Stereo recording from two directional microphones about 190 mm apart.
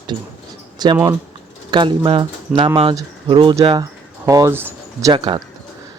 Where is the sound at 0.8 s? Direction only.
20° right (ahead or behind).